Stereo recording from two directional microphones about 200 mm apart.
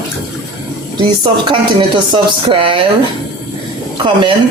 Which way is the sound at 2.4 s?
25° right (ahead or behind).